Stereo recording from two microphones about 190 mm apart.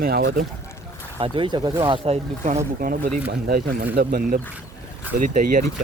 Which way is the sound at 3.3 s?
55° right (ahead or behind).